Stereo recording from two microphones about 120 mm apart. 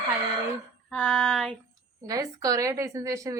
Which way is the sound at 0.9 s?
5° left (ahead or behind).